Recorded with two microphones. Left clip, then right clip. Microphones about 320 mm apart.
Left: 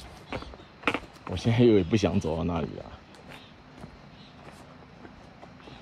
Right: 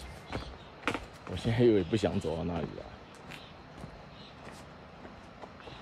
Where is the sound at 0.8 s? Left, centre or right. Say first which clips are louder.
Left 6 dB; centre.